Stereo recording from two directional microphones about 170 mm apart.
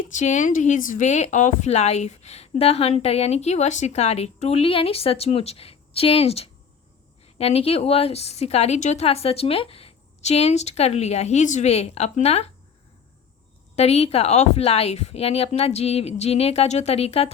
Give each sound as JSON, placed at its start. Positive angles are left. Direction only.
{"t": 0.1, "sound": "speech", "side_deg": 45}
{"t": 13.7, "sound": "speech", "side_deg": 40}